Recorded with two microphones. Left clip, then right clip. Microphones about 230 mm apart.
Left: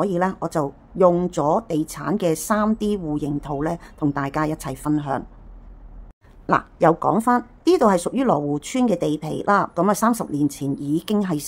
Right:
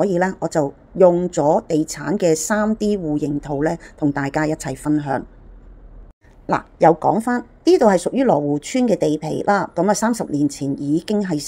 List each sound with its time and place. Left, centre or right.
0.0 s speech: centre
6.4 s a woman's voice: centre